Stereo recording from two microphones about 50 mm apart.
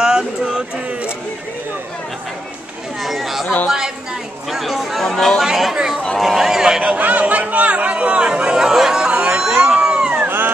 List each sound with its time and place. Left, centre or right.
0.0 s a sound: centre
3.0 s chatter: centre
3.6 s speech: centre
4.5 s chatter: centre
5.4 s chatter: centre
6.1 s a sound: centre
6.8 s chatter: right; by 9.1 s centre
9.3 s crowd: centre
10.2 s dog: right